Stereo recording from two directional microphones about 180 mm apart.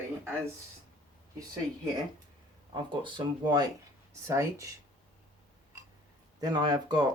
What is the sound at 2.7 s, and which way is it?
Speech, 25° right (ahead or behind).